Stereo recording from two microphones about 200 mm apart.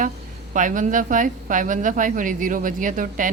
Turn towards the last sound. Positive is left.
turn(degrees=-40)  # may be behind; listen again after turning